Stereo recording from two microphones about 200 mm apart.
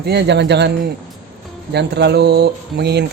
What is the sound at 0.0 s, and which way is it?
Speech, 55° right (ahead or behind).